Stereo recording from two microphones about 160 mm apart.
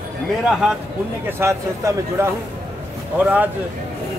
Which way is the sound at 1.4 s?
20° right (ahead or behind).